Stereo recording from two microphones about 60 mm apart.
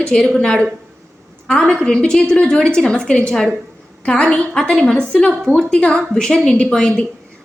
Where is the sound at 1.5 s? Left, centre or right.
Centre.